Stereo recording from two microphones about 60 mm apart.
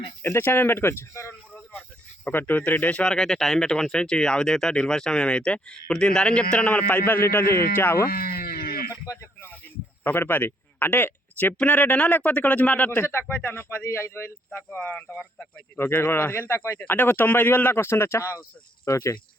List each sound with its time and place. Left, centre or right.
0.2 s speech: left
2.2 s a man's voice: left
3.0 s speech: centre; by 7.9 s left
9.1 s speech: left
9.4 s a sound: left
11.5 s a man's voice: left
13.0 s speech: left
14.9 s a man's voice: left
15.8 s speech: left
16.8 s speech: left